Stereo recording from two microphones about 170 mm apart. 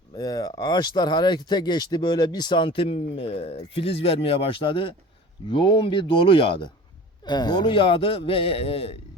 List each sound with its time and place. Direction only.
0.2 s a man's voice: 20° left (ahead or behind)